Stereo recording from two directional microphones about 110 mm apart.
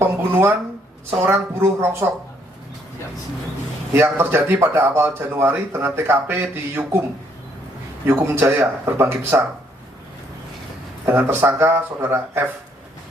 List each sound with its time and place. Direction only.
0.0 s a sound: 20° right (ahead or behind)
1.2 s speech: 20° right (ahead or behind)
3.9 s speech: 20° right (ahead or behind)
8.0 s speech: 20° right (ahead or behind)
11.0 s speech: 20° right (ahead or behind)